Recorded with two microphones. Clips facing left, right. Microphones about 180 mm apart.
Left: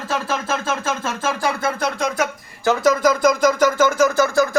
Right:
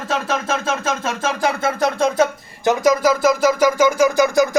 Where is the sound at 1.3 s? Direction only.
20° right (ahead or behind).